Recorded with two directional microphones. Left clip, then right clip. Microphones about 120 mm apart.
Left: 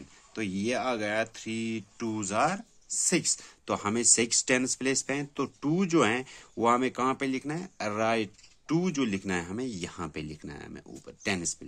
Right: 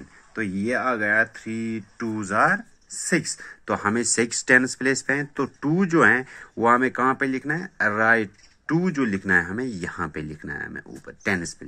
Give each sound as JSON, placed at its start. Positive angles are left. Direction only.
{"t": 0.3, "sound": "speech", "side_deg": 55}
{"t": 2.1, "sound": "speech", "side_deg": 50}